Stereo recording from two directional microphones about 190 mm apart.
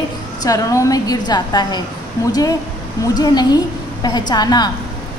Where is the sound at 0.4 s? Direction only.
15° left (ahead or behind).